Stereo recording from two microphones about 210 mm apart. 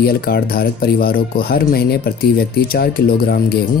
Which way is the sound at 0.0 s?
45° left (ahead or behind).